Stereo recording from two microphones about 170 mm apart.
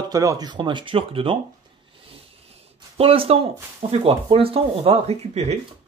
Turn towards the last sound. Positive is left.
turn(degrees=-40)  # may be behind; listen again after turning